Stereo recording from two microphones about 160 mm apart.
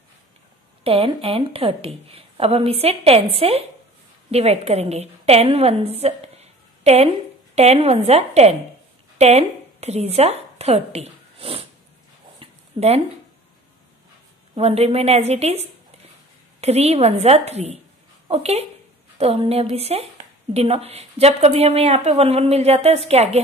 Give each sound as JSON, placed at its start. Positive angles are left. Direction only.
{"t": 0.8, "sound": "a woman's voice", "side_deg": -35}
{"t": 12.4, "sound": "a sound", "side_deg": -40}
{"t": 14.5, "sound": "a woman's voice", "side_deg": -40}